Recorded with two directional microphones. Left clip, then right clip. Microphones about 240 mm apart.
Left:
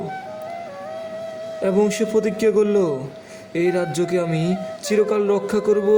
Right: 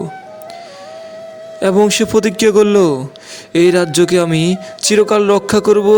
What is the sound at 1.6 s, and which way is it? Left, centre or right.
Speech, right.